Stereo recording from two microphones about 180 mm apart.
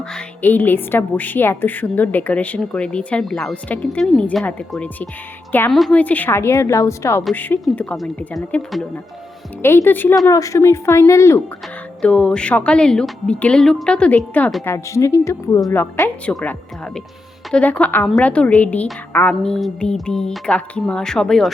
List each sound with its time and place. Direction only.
0.0 s a woman's voice: 5° left (ahead or behind)
12.0 s a woman's voice: 5° left (ahead or behind)